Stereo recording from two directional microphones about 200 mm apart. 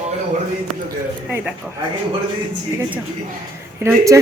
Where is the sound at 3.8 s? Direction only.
15° right (ahead or behind).